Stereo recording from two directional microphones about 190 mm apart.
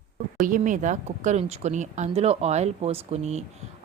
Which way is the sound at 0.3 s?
40° right (ahead or behind).